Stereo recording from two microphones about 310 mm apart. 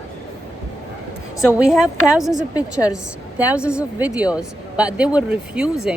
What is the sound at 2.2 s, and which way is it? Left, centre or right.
Speech, centre.